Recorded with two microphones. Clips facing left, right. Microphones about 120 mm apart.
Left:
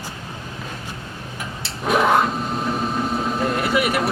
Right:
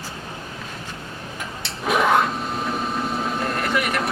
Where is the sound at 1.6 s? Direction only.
Centre (ahead or behind).